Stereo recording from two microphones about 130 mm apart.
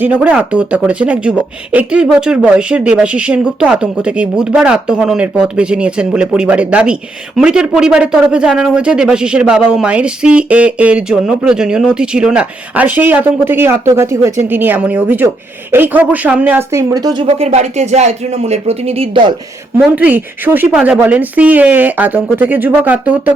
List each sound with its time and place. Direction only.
0.0 s speech: 10° right (ahead or behind)
16.9 s speech: 30° right (ahead or behind)
17.2 s speech: 55° right (ahead or behind)
19.7 s speech: 15° right (ahead or behind)